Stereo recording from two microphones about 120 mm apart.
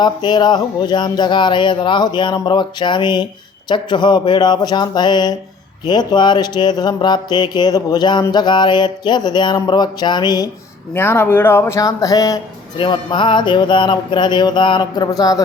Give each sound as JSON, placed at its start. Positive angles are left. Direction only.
{"t": 0.0, "sound": "mantra", "side_deg": 35}
{"t": 10.9, "sound": "speech", "side_deg": 20}
{"t": 12.8, "sound": "mantra", "side_deg": 40}